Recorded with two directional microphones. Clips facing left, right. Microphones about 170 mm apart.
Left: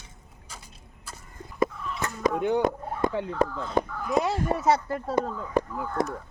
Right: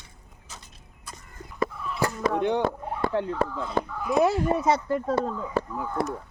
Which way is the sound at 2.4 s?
10° left (ahead or behind).